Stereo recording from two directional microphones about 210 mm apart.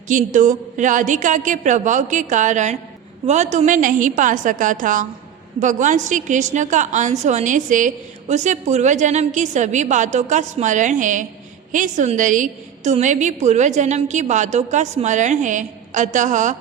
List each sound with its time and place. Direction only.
0.1 s a woman's voice: 35° right (ahead or behind)